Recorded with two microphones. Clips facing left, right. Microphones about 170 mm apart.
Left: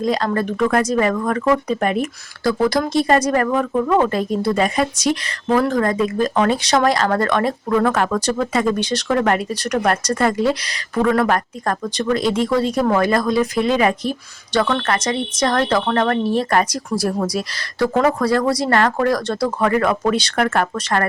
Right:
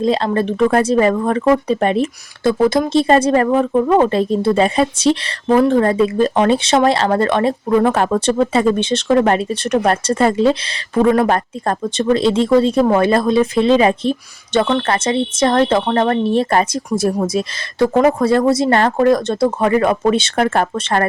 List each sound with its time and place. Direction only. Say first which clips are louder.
0.0 s speech: right 3 dB; 25° right (ahead or behind)